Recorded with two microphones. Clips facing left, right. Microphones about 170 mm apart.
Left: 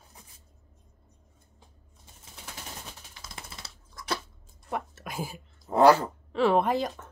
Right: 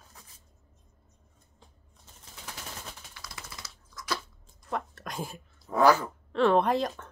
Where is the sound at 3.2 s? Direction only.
25° left (ahead or behind).